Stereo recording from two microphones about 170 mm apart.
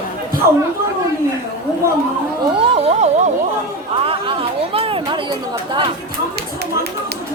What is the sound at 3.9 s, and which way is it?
Speech, 30° right (ahead or behind).